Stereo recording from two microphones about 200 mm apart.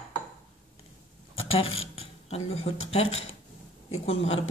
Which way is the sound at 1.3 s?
30° left (ahead or behind).